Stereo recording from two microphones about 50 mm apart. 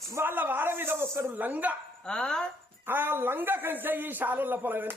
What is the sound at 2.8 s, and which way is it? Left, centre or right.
A man's voice, right.